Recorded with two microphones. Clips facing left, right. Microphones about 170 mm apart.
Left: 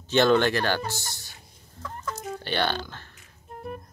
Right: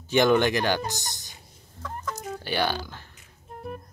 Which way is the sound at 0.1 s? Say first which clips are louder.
Even; 15° right (ahead or behind).